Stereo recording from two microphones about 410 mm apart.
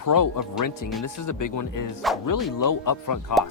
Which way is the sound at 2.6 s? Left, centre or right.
Left.